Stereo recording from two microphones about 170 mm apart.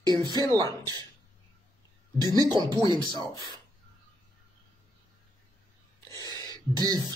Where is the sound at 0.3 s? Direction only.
25° right (ahead or behind).